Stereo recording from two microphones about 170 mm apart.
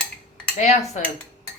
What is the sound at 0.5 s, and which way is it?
Speech, 40° left (ahead or behind).